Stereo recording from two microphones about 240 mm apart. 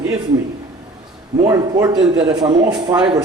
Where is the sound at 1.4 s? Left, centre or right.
Centre.